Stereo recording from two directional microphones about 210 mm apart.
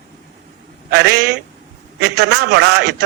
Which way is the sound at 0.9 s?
50° right (ahead or behind).